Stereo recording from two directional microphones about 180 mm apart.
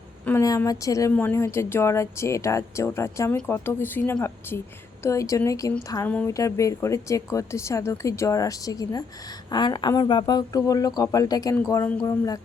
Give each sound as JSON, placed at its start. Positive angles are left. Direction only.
{"t": 0.3, "sound": "speech", "side_deg": 15}
{"t": 6.1, "sound": "speech", "side_deg": 5}
{"t": 6.3, "sound": "speech", "side_deg": 15}